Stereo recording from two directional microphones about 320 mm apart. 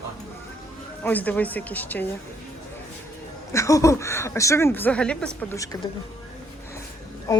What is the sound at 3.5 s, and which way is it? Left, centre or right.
Speech, centre.